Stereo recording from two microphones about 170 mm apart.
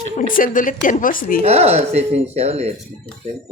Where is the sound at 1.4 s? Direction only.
40° right (ahead or behind).